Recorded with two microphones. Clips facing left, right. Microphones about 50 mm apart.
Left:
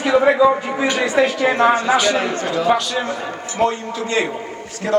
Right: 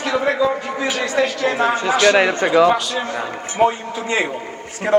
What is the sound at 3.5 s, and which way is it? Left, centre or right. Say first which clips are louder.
Speech: right 2 dB; centre.